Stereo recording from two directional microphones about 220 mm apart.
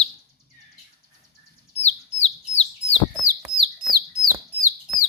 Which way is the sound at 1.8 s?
30° left (ahead or behind).